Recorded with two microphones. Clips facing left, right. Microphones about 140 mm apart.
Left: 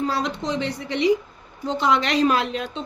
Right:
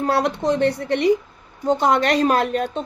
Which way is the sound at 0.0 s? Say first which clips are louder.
Right 5 dB; 60° right (ahead or behind).